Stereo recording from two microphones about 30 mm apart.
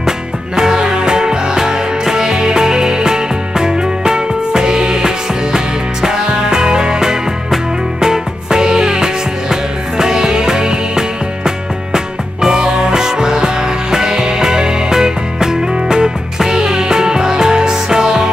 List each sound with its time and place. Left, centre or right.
0.6 s music: centre